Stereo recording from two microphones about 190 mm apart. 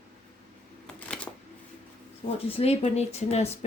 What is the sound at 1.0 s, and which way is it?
Shuffling cards, 5° left (ahead or behind).